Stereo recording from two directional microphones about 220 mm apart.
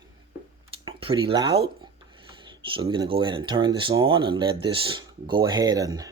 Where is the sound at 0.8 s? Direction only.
25° right (ahead or behind).